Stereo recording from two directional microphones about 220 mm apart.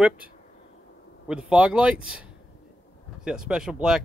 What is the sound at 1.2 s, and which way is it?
Speech, 5° right (ahead or behind).